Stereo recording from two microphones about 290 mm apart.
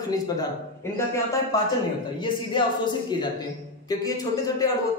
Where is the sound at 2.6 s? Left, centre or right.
Centre.